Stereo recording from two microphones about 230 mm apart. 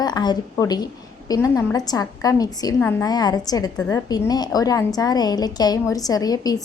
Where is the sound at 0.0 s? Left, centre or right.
Centre.